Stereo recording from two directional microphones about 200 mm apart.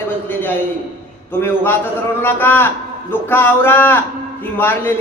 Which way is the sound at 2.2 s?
10° left (ahead or behind).